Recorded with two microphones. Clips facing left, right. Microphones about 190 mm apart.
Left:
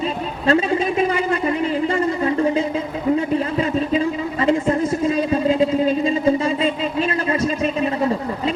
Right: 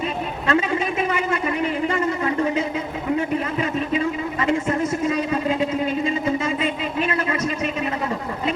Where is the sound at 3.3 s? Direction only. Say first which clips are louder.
Left 4 dB; 30° left (ahead or behind).